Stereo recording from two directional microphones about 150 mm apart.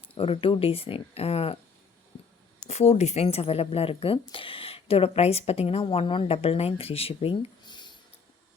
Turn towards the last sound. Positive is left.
turn(degrees=30)  # may be behind; listen again after turning